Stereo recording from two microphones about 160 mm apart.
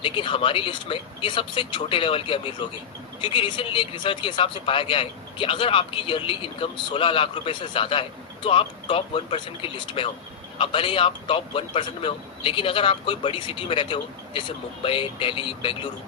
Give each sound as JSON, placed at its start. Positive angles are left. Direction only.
{"t": 0.0, "sound": "a man's voice", "side_deg": 30}